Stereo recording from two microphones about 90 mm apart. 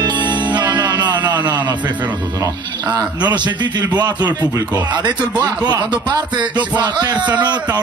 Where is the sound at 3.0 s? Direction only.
55° right (ahead or behind).